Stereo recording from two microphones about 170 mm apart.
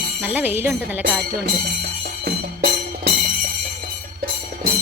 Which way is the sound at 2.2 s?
75° right (ahead or behind).